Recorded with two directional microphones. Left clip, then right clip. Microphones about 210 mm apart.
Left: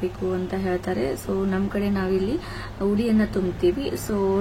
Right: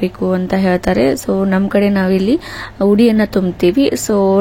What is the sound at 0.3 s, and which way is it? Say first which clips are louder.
Speech: right 12 dB; 35° right (ahead or behind).